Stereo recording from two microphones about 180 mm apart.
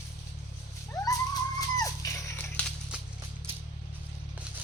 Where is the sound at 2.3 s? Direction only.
5° left (ahead or behind).